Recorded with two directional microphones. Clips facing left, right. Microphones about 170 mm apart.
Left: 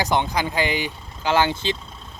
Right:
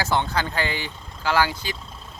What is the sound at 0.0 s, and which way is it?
Speech, 15° left (ahead or behind).